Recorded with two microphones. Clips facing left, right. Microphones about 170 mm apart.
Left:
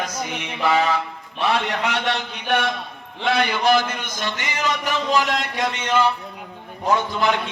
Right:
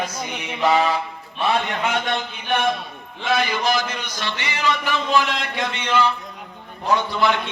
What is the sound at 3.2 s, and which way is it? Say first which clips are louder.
A man's voice: left 1 dB; 65° left (ahead or behind).